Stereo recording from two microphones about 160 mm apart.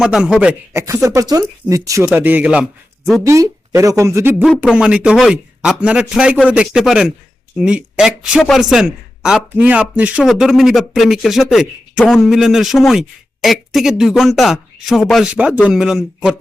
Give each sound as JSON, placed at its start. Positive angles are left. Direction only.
{"t": 0.0, "sound": "speech", "side_deg": -5}
{"t": 0.7, "sound": "speech", "side_deg": -15}
{"t": 3.2, "sound": "speech", "side_deg": -20}
{"t": 4.4, "sound": "speech", "side_deg": 0}